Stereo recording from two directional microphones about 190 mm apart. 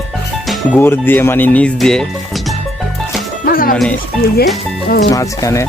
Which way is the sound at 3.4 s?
50° left (ahead or behind).